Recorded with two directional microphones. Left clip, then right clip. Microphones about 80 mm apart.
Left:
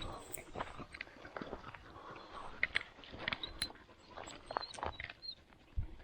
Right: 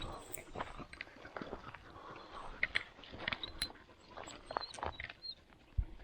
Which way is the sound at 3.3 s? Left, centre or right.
Left.